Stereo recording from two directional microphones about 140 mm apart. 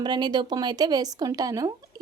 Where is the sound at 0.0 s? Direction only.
30° right (ahead or behind).